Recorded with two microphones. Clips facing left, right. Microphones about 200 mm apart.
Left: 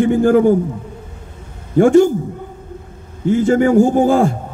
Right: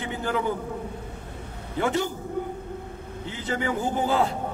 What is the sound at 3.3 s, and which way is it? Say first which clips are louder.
A man's voice: left 16 dB; 50° left (ahead or behind).